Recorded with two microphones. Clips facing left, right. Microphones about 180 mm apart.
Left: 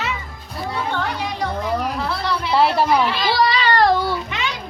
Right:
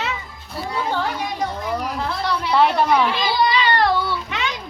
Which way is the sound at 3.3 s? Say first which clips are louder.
Left 1 dB; 40° left (ahead or behind).